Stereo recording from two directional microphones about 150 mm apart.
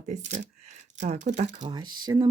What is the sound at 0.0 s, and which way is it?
Speech, 55° right (ahead or behind).